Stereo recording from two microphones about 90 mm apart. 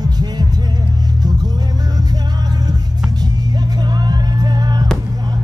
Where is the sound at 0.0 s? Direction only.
50° right (ahead or behind).